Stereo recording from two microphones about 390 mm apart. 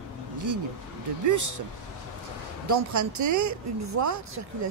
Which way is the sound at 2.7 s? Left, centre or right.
Right.